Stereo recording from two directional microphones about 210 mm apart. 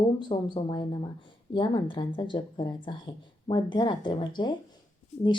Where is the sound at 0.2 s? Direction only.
20° left (ahead or behind).